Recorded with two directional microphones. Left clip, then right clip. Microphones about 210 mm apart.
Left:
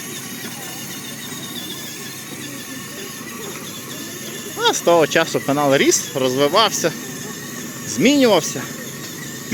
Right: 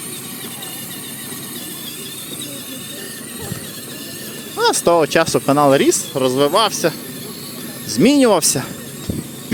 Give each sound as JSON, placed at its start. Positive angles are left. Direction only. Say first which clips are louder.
{"t": 4.5, "sound": "speech", "louder": "right 1 dB", "side_deg": -25}
{"t": 8.1, "sound": "speech", "louder": "even", "side_deg": -35}